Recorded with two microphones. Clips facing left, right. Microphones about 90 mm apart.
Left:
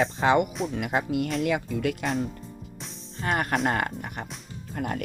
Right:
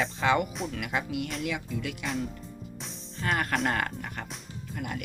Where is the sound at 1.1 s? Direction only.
40° left (ahead or behind).